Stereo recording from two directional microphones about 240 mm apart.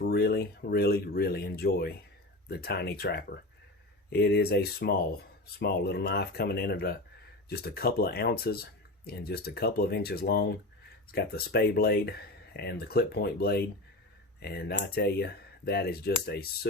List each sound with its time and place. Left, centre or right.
0.0 s speech: left